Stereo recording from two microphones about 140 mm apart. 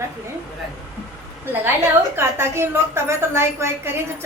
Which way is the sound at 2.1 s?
20° right (ahead or behind).